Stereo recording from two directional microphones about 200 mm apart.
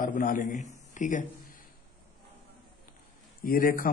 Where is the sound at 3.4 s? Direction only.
45° left (ahead or behind).